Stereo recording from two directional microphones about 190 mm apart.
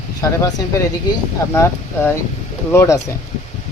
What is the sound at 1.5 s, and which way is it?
Speech, 15° left (ahead or behind).